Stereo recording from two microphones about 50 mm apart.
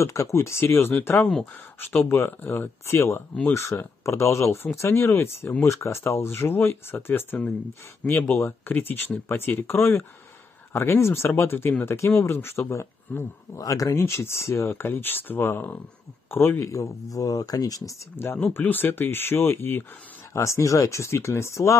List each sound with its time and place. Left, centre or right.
0.0 s speech: left
2.9 s speech: left
8.0 s speech: left
8.4 s speech: left
13.1 s speech: left
13.8 s speech: left
16.5 s speech: left
18.1 s speech: left
20.3 s speech: left